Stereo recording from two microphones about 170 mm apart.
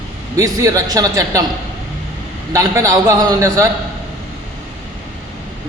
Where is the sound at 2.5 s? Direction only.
20° right (ahead or behind).